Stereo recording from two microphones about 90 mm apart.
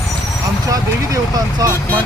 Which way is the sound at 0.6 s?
40° right (ahead or behind).